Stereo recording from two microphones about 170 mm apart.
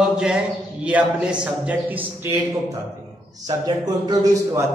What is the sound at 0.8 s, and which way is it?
A man's voice, 5° right (ahead or behind).